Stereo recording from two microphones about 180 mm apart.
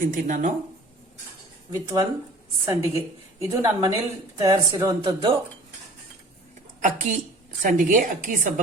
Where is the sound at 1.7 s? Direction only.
15° right (ahead or behind).